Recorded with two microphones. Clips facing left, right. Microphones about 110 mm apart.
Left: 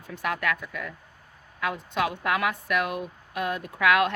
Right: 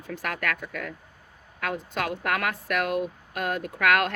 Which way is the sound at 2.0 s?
55° right (ahead or behind).